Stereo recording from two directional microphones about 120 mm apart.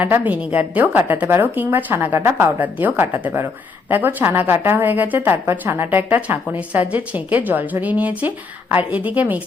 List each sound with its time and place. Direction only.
0.0 s a woman's voice: 15° right (ahead or behind)